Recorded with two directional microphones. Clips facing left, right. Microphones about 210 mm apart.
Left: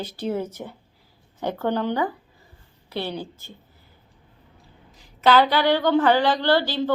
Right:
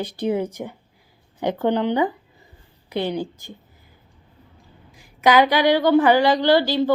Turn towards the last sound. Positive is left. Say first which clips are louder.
# right 4 dB
turn(degrees=-10)  # may be behind; listen again after turning